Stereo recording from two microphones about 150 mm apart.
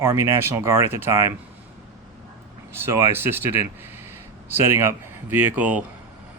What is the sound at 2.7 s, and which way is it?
Speech, 15° right (ahead or behind).